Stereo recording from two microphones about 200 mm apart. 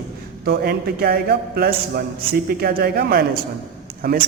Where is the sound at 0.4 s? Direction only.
50° right (ahead or behind).